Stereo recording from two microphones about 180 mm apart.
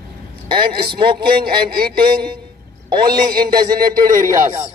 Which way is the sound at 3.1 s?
55° right (ahead or behind).